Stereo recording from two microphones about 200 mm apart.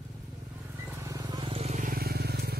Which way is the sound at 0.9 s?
15° right (ahead or behind).